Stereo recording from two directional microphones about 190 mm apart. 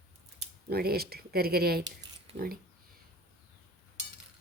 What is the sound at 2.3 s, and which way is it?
Speech, 30° right (ahead or behind).